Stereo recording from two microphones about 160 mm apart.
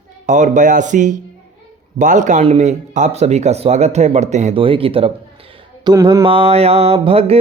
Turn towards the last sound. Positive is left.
turn(degrees=-40)  # may be behind; listen again after turning